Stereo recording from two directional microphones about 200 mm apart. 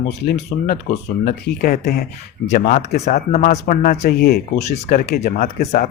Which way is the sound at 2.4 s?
40° left (ahead or behind).